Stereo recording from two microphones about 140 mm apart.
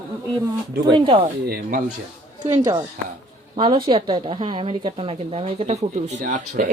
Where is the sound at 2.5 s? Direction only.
30° right (ahead or behind).